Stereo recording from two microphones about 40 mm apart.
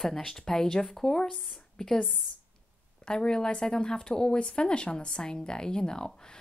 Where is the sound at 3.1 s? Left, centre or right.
Left.